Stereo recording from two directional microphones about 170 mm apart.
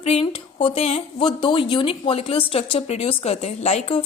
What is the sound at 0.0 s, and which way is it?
Speech, 35° left (ahead or behind).